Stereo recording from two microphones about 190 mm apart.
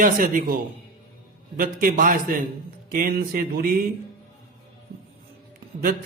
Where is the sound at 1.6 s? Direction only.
45° right (ahead or behind).